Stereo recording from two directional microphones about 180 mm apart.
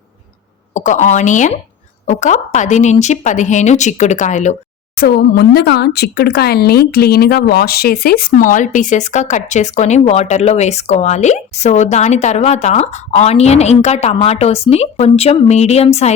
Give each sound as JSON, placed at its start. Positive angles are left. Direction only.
{"t": 0.7, "sound": "speech", "side_deg": 40}
{"t": 4.9, "sound": "speech", "side_deg": 55}